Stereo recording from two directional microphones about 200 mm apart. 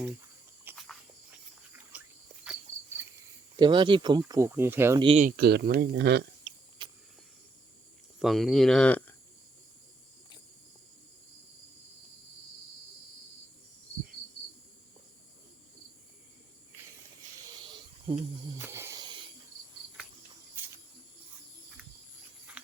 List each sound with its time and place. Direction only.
0.7 s insect: 10° right (ahead or behind)
1.9 s a sound: 5° right (ahead or behind)
3.0 s cricket: 10° right (ahead or behind)
3.6 s speech: 25° right (ahead or behind)
4.9 s speech: 25° right (ahead or behind)
5.4 s speech: 55° right (ahead or behind)
6.8 s a sound: 25° right (ahead or behind)
8.2 s speech: centre (ahead or behind)
17.6 s snake: 25° right (ahead or behind)
18.5 s wild animals: 15° right (ahead or behind)
22.6 s a sound: 5° right (ahead or behind)